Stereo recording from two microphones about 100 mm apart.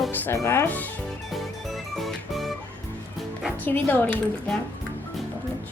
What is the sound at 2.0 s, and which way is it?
Music, centre (ahead or behind).